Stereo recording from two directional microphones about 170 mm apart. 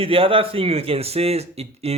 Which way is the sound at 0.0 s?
35° right (ahead or behind).